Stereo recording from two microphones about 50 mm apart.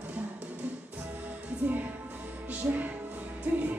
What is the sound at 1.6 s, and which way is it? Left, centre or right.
Music, right.